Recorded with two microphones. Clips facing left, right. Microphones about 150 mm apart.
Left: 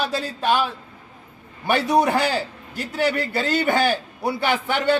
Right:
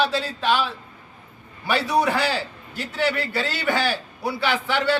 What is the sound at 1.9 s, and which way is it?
Speech, 20° left (ahead or behind).